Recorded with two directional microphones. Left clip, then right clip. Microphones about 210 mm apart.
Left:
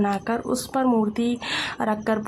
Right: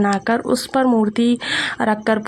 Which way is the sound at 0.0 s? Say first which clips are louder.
Right 6 dB; 20° right (ahead or behind).